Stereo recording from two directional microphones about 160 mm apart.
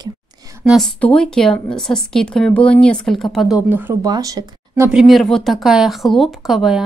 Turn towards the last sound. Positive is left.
turn(degrees=0)  # may be behind; listen again after turning